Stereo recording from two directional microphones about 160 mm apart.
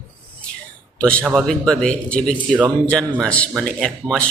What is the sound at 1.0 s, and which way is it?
Speech, 5° left (ahead or behind).